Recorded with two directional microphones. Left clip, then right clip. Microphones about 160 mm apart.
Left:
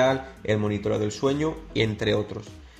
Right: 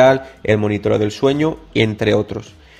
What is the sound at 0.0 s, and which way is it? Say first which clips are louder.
Speech: right 11 dB; 40° right (ahead or behind).